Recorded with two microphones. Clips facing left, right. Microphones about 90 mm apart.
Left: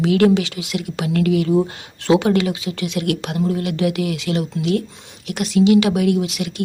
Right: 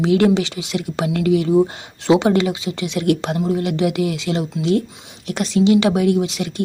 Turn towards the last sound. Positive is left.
turn(degrees=-30)  # may be behind; listen again after turning